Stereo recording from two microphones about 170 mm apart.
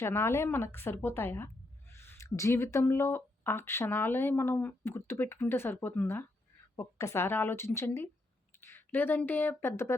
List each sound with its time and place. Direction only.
0.0 s speech: 15° left (ahead or behind)